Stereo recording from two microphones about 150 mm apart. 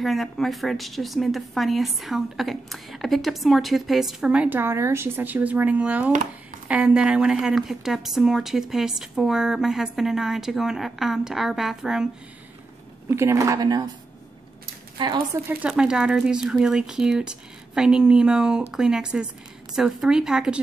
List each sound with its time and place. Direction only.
0.0 s a woman's voice: centre (ahead or behind)
13.1 s speech: 20° right (ahead or behind)
15.4 s a woman's voice: 5° right (ahead or behind)